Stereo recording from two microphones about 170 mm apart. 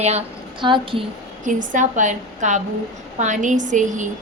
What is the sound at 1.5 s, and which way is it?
A woman's voice, 50° right (ahead or behind).